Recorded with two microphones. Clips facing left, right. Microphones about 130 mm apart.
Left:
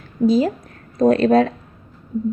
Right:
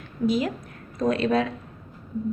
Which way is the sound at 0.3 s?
35° left (ahead or behind).